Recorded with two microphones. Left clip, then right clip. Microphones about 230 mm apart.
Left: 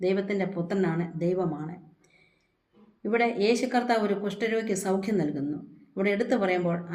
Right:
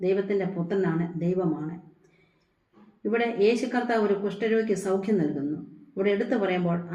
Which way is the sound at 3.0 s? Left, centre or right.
Left.